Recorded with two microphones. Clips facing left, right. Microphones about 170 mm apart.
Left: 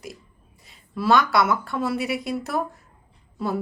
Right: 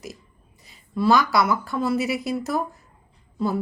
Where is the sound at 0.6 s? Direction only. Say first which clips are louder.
Right 4 dB; centre (ahead or behind).